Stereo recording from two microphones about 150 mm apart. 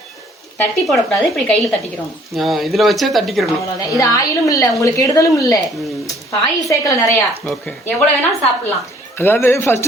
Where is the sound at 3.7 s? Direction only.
20° left (ahead or behind).